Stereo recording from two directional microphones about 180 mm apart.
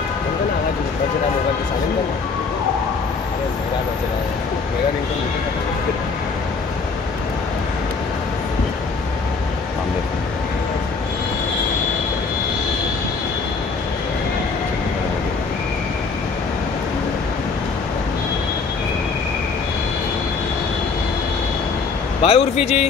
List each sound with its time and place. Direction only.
22.2 s a man's voice: 35° left (ahead or behind)